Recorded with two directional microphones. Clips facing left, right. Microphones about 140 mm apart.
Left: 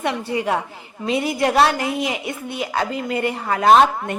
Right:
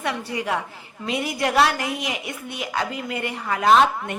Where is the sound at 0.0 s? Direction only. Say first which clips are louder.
Left 4 dB; 25° left (ahead or behind).